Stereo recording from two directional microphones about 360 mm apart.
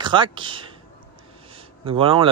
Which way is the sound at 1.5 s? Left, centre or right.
Centre.